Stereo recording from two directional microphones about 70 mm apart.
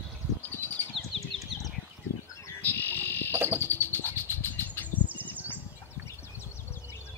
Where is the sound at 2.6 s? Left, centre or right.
Left.